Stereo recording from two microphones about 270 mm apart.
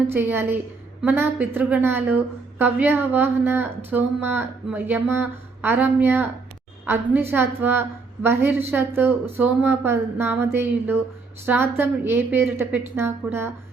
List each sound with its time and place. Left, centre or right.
0.1 s speech: centre